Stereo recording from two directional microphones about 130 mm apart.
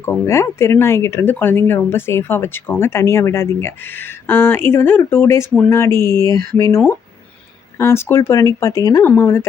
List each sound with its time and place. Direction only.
0.0 s speech: 20° left (ahead or behind)